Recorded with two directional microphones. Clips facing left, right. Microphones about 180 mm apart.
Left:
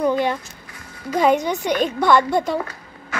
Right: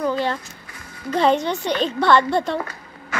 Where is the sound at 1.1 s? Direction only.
10° left (ahead or behind).